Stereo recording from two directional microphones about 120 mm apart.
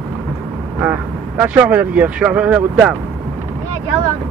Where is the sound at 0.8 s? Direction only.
15° right (ahead or behind).